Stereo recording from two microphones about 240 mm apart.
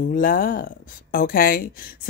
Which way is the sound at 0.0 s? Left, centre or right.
Left.